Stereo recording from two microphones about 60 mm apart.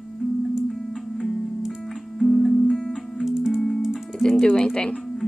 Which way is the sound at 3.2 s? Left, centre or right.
Centre.